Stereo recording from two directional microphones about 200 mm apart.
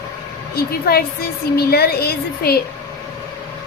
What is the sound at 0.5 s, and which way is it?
A woman's voice, 50° left (ahead or behind).